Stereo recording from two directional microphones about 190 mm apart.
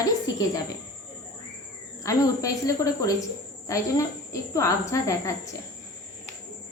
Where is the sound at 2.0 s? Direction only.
15° left (ahead or behind).